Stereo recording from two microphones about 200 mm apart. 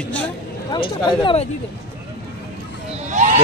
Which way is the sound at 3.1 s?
40° right (ahead or behind).